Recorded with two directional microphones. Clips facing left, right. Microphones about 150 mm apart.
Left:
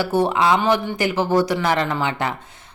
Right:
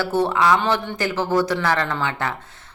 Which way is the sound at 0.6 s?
10° left (ahead or behind).